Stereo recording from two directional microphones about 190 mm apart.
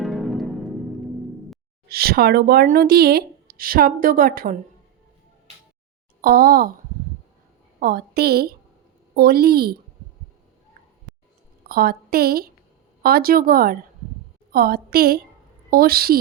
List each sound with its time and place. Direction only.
0.0 s music: centre (ahead or behind)
1.9 s speech: 55° right (ahead or behind)
6.2 s speech: 50° right (ahead or behind)
7.8 s a woman's voice: 50° right (ahead or behind)
11.7 s speech: 50° right (ahead or behind)